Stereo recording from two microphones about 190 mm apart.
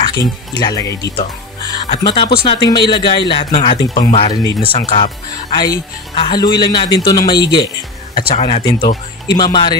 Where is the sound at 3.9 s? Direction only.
45° left (ahead or behind).